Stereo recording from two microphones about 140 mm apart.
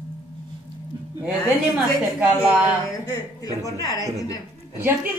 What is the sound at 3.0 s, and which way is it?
A woman's voice, 25° left (ahead or behind).